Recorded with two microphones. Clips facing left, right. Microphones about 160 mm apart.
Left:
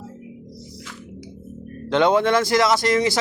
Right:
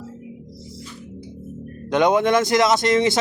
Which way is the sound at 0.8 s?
90° left.